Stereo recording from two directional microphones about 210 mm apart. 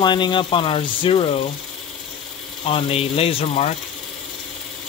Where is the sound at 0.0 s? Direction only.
20° left (ahead or behind).